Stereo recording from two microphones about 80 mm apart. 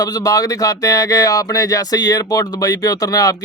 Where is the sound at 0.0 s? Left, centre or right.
Left.